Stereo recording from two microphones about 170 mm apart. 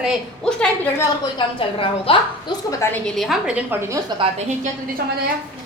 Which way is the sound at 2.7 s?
15° left (ahead or behind).